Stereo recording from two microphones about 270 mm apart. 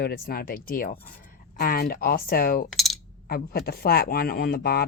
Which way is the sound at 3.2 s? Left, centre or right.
Left.